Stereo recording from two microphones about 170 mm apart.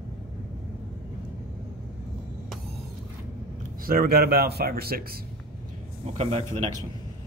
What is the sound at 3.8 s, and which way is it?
Speech, 60° right (ahead or behind).